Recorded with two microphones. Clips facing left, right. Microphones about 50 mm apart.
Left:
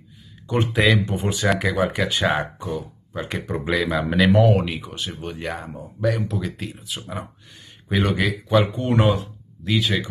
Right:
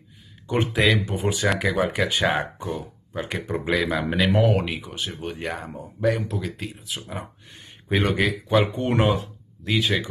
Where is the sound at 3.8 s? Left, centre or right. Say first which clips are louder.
Left 5 dB; centre.